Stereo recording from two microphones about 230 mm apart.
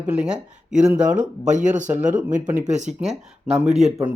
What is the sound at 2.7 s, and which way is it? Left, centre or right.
Speech, right.